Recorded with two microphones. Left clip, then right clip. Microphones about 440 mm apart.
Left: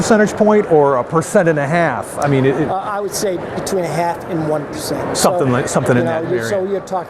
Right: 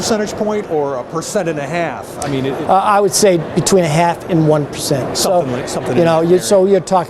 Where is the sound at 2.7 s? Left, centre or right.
Right.